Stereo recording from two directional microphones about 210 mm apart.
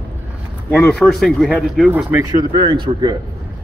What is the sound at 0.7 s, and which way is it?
Speech, 5° left (ahead or behind).